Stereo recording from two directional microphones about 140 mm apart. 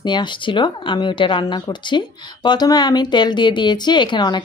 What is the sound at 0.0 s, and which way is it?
Speech, 30° left (ahead or behind).